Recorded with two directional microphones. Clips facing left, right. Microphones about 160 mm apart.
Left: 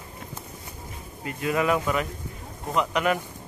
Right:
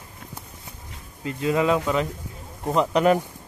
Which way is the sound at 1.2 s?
25° right (ahead or behind).